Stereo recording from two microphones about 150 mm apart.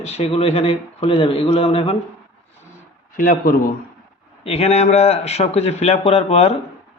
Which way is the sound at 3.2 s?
65° left (ahead or behind).